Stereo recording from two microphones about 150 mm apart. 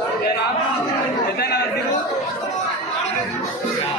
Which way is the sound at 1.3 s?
90° left.